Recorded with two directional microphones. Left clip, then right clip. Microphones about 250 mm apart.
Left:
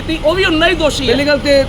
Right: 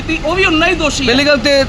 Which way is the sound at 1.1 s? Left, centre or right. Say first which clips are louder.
Right 2 dB; right.